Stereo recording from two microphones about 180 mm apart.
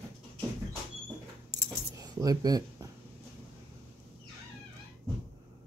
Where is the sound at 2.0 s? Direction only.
20° right (ahead or behind).